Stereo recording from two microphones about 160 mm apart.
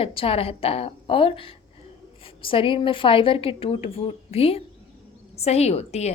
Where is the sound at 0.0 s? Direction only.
35° left (ahead or behind).